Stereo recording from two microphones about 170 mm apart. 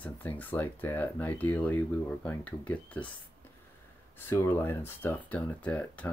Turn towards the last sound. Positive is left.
turn(degrees=10)  # may be behind; listen again after turning